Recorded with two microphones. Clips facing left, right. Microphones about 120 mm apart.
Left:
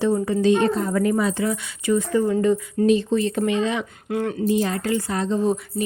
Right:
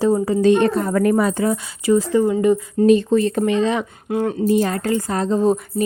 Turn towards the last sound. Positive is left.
turn(degrees=-40)  # may be behind; listen again after turning